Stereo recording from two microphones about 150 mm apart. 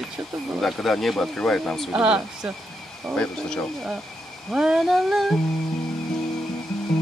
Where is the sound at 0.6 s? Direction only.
Centre (ahead or behind).